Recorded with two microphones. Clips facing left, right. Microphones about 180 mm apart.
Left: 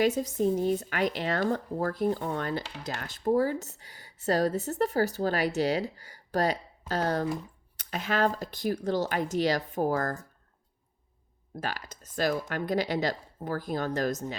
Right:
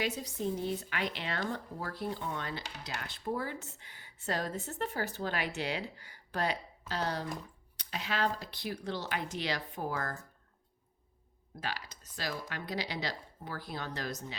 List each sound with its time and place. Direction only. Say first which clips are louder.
0.0 s speech: left 9 dB; 45° left (ahead or behind)
11.6 s speech: left 4 dB; 45° left (ahead or behind)